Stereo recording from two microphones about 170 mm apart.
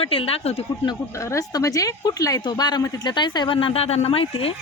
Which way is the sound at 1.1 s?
20° left (ahead or behind).